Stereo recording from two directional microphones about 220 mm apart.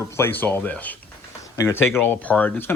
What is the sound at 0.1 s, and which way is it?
Speech, 10° left (ahead or behind).